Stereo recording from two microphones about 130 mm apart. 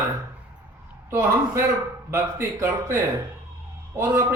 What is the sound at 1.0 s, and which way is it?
A man's voice, 20° right (ahead or behind).